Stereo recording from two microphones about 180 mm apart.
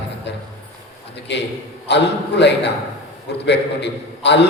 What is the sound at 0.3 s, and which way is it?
A man's voice, 70° left (ahead or behind).